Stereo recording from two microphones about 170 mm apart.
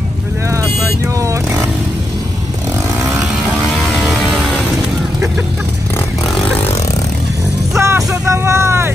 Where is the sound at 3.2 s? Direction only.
5° right (ahead or behind).